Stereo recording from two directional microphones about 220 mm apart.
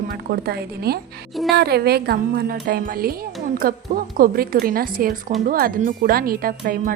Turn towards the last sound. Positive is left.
turn(degrees=-40)  # may be behind; listen again after turning